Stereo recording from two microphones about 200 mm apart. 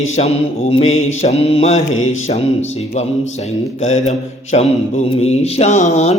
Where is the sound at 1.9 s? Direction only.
90° left.